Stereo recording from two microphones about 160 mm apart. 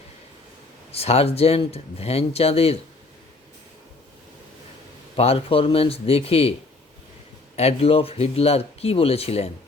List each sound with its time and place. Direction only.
0.9 s speech: 40° left (ahead or behind)
5.1 s speech: 40° left (ahead or behind)
7.5 s speech: 40° left (ahead or behind)